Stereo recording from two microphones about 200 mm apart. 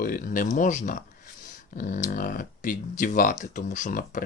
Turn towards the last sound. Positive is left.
turn(degrees=40)  # may be behind; listen again after turning